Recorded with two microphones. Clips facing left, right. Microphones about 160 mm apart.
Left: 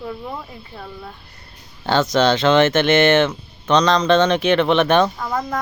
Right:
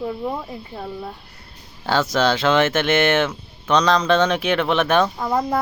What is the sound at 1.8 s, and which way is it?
Speech, 5° right (ahead or behind).